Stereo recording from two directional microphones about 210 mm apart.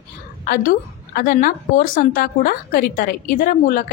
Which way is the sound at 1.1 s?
40° left (ahead or behind).